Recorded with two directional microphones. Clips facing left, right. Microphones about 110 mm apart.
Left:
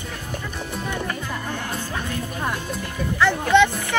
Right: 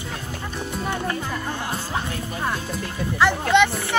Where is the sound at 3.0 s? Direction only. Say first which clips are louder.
Even; 15° right (ahead or behind).